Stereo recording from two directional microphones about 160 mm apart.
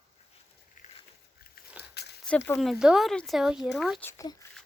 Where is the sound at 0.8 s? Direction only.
50° left (ahead or behind).